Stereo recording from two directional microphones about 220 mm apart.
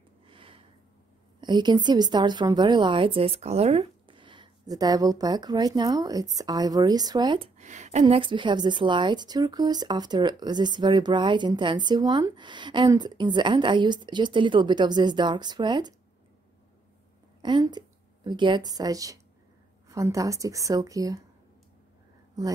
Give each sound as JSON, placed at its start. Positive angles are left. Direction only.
{"t": 0.3, "sound": "a sound", "side_deg": -25}
{"t": 1.4, "sound": "a woman's voice", "side_deg": -20}
{"t": 8.0, "sound": "a woman's voice", "side_deg": -20}
{"t": 17.4, "sound": "a woman's voice", "side_deg": -20}